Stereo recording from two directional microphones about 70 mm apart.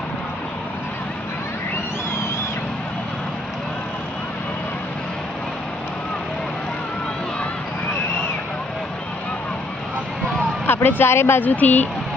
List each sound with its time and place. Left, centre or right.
10.8 s speech: left